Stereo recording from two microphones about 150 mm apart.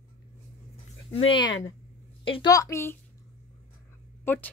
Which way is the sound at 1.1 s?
35° left (ahead or behind).